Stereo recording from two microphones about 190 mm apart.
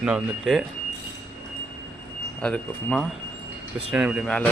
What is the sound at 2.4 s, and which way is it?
Speech, 5° left (ahead or behind).